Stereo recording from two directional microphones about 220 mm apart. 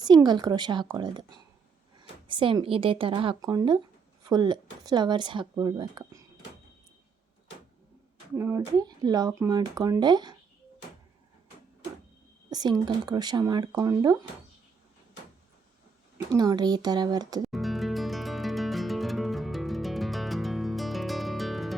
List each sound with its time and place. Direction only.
0.0 s speech: 20° right (ahead or behind)
2.2 s speech: 20° right (ahead or behind)
8.4 s speech: 15° right (ahead or behind)
12.5 s speech: 20° right (ahead or behind)
16.1 s speech: 15° right (ahead or behind)
17.5 s music: centre (ahead or behind)